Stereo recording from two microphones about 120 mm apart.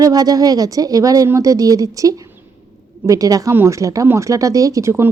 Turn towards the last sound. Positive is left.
turn(degrees=-25)  # may be behind; listen again after turning